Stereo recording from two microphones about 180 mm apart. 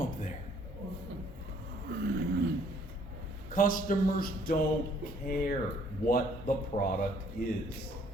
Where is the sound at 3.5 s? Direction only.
50° left (ahead or behind).